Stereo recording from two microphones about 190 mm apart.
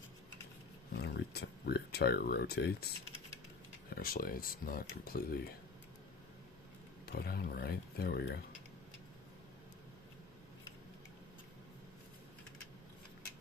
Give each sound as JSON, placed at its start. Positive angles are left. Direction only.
{"t": 0.9, "sound": "speech", "side_deg": 60}
{"t": 3.9, "sound": "speech", "side_deg": 50}
{"t": 7.1, "sound": "speech", "side_deg": 55}